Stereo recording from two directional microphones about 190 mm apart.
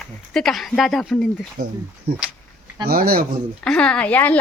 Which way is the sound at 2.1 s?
55° right (ahead or behind).